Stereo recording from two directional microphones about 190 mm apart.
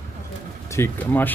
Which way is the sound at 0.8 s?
15° left (ahead or behind).